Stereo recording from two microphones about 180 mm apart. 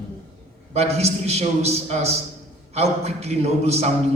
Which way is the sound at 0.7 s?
35° right (ahead or behind).